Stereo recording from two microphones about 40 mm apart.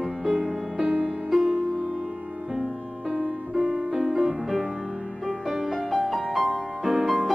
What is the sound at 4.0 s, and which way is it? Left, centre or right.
Music, centre.